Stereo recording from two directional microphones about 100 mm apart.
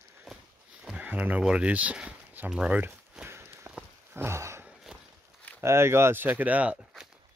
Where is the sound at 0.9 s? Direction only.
15° right (ahead or behind).